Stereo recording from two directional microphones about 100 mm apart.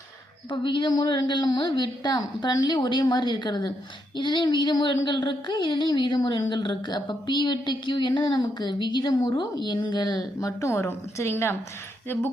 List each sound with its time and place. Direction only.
0.5 s a woman's voice: 55° left (ahead or behind)
10.6 s a woman's voice: 30° left (ahead or behind)